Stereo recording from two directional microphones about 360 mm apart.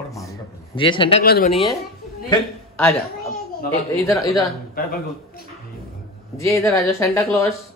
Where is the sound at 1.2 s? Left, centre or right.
Left.